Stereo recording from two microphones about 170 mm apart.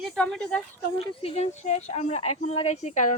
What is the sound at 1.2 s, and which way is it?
Speech, 40° left (ahead or behind).